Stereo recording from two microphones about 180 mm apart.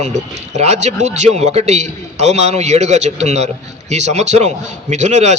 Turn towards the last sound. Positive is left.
turn(degrees=-40)  # may be behind; listen again after turning